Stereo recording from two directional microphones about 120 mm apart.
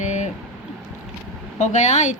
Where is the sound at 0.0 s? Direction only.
85° left.